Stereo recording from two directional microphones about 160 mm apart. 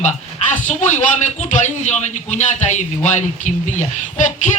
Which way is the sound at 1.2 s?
50° left (ahead or behind).